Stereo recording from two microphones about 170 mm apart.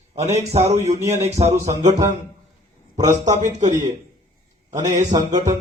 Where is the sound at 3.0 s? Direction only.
45° right (ahead or behind).